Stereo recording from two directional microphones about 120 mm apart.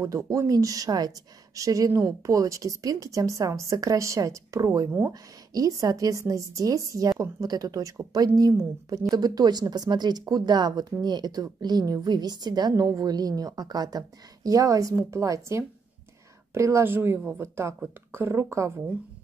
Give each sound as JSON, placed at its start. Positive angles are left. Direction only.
{"t": 0.0, "sound": "a woman's voice", "side_deg": -25}